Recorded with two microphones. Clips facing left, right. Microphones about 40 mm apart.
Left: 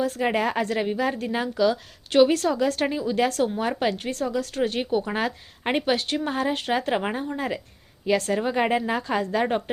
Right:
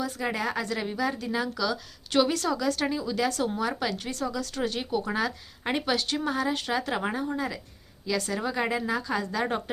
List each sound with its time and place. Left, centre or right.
0.0 s a woman's voice: left
5.1 s a woman's voice: left
9.4 s a woman's voice: left